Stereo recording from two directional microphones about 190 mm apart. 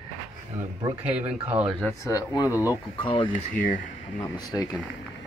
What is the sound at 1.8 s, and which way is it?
Speech, 15° left (ahead or behind).